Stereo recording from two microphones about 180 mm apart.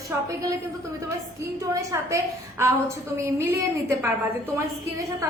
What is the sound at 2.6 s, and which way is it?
Speech, 15° right (ahead or behind).